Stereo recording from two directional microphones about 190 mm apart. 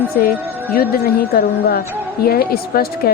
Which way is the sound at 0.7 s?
50° left (ahead or behind).